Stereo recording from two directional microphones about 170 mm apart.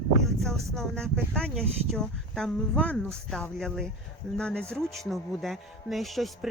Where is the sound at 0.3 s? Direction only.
Centre (ahead or behind).